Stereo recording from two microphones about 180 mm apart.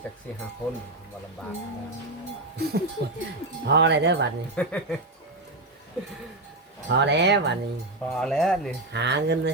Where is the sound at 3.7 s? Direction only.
70° right (ahead or behind).